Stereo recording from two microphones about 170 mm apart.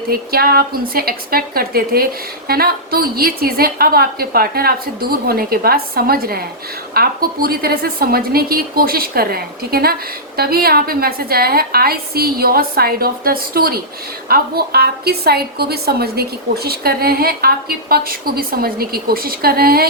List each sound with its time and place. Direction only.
0.1 s a woman's voice: 60° right (ahead or behind)